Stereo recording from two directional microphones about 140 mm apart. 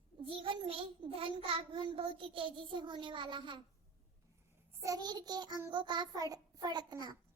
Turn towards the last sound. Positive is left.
turn(degrees=-30)  # may be behind; listen again after turning